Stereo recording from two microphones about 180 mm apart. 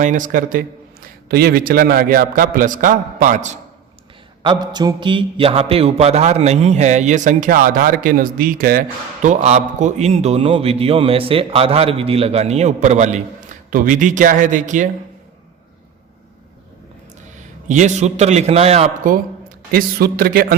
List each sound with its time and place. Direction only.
0.0 s a man's voice: 45° right (ahead or behind)
4.4 s a man's voice: 25° right (ahead or behind); by 8.8 s 50° right (ahead or behind)
9.2 s a man's voice: 40° right (ahead or behind)
17.3 s a man's voice: 40° right (ahead or behind)
19.1 s a man's voice: 55° right (ahead or behind)